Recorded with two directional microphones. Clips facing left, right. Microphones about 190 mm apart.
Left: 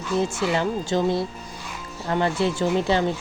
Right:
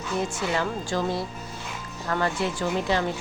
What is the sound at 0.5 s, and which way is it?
Speech, 25° left (ahead or behind).